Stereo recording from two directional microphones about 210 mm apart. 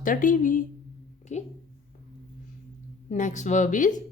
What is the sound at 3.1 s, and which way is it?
Speech, 35° left (ahead or behind).